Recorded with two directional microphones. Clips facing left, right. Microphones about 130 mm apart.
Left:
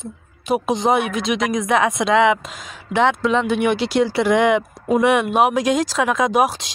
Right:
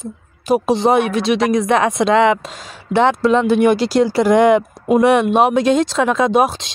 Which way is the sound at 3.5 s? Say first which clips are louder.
Right 5 dB; 40° right (ahead or behind).